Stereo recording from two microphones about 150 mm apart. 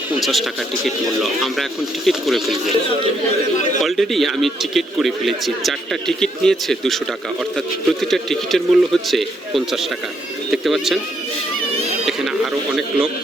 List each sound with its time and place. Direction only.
0.2 s a man's voice: centre (ahead or behind)
3.8 s a man's voice: centre (ahead or behind)
12.0 s a sound: 5° right (ahead or behind)